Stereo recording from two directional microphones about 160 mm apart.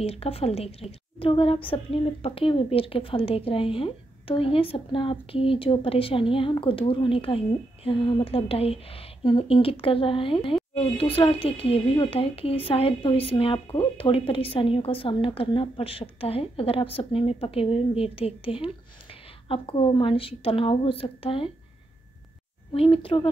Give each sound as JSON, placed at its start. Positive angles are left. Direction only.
{"t": 0.0, "sound": "a woman's voice", "side_deg": 40}
{"t": 22.7, "sound": "a woman's voice", "side_deg": 35}